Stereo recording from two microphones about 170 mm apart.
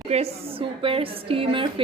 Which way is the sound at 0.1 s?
35° right (ahead or behind).